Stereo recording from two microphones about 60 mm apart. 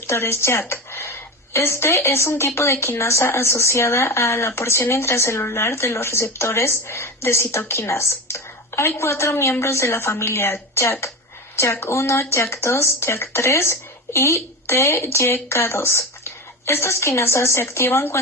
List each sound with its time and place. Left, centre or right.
0.1 s a woman's voice: left